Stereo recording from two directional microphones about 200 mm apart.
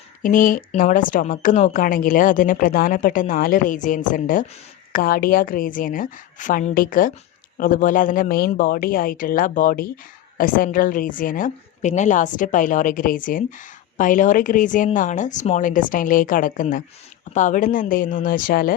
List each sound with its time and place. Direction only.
0.2 s a woman's voice: 40° left (ahead or behind)